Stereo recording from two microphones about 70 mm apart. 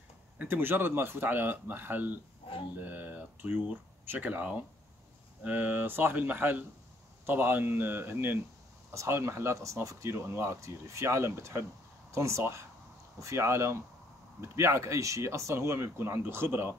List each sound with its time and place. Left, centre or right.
0.4 s speech: right
8.9 s speech: right